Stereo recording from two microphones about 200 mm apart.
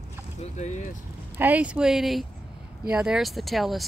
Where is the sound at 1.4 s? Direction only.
10° right (ahead or behind).